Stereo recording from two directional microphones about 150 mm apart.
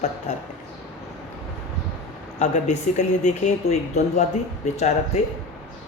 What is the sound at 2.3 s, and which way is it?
Speech, 50° left (ahead or behind).